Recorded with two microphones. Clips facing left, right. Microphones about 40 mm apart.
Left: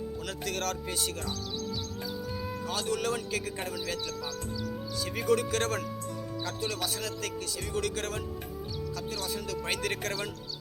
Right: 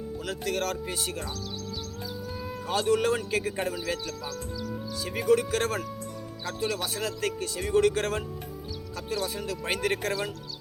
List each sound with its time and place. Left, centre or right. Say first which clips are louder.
0.3 s speech: right 5 dB; centre
2.6 s speech: right 7 dB; right
5.0 s speech: right 4 dB; centre; by 8.2 s right
9.1 s speech: right 7 dB; centre